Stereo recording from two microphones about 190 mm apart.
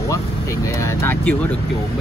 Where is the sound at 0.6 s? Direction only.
15° left (ahead or behind).